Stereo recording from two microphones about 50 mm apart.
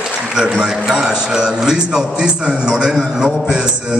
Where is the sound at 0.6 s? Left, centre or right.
Centre.